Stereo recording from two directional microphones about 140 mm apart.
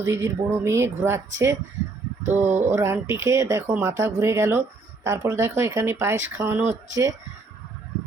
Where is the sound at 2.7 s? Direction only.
20° right (ahead or behind).